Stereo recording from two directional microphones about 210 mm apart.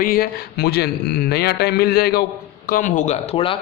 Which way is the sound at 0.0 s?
45° left (ahead or behind).